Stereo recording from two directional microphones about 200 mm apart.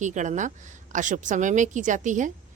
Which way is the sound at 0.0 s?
35° right (ahead or behind).